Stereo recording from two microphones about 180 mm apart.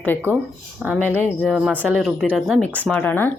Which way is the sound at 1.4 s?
5° right (ahead or behind).